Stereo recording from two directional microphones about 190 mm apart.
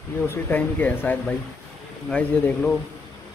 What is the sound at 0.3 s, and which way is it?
A man's voice, 10° left (ahead or behind).